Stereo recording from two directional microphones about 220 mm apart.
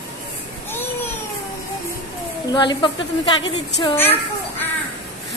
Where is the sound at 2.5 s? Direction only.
20° left (ahead or behind).